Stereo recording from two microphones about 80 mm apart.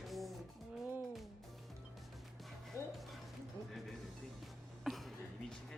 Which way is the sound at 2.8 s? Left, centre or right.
Left.